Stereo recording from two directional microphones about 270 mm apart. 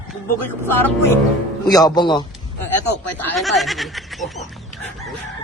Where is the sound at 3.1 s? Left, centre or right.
Centre.